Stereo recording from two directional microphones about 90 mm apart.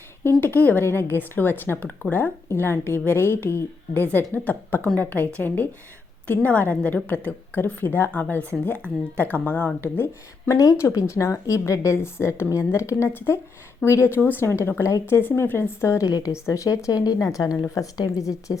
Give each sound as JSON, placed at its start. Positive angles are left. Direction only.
{"t": 0.3, "sound": "a woman's voice", "side_deg": 25}
{"t": 10.6, "sound": "a woman's voice", "side_deg": 35}